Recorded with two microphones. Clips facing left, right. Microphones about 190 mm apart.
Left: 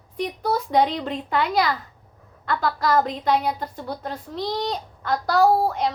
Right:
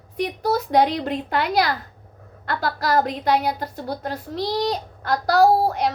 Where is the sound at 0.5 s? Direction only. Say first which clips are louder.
Right 2 dB; 75° right (ahead or behind).